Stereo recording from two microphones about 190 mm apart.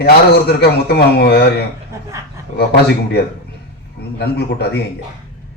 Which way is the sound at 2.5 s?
60° left (ahead or behind).